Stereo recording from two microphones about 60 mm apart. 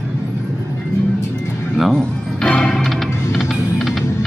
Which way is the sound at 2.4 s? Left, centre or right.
Centre.